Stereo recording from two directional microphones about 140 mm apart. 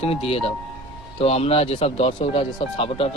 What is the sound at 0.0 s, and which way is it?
Speech, 45° left (ahead or behind).